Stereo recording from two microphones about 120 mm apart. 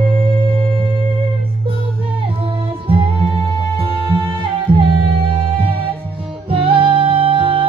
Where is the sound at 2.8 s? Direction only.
50° right (ahead or behind).